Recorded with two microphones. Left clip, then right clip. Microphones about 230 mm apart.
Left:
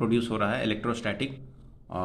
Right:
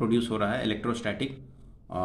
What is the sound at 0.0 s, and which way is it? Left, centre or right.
Speech, centre.